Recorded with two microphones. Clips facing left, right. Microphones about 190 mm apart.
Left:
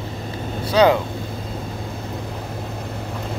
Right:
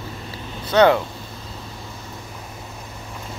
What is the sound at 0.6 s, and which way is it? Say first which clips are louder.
Speech: even; 10° left (ahead or behind).